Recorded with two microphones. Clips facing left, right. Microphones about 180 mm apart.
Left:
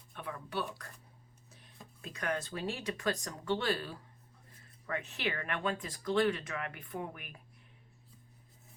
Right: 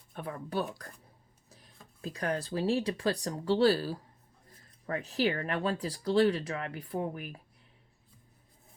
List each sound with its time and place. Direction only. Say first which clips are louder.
0.1 s speech: right 5 dB; 40° right (ahead or behind)
1.5 s a sound: right 3 dB; 35° right (ahead or behind)
2.0 s speech: right 4 dB; 35° right (ahead or behind)